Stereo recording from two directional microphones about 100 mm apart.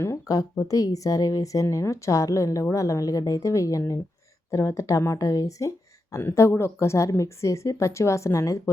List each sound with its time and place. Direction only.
0.0 s a woman's voice: 35° left (ahead or behind)